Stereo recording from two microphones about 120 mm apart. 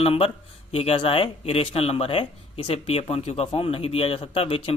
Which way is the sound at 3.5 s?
50° left (ahead or behind).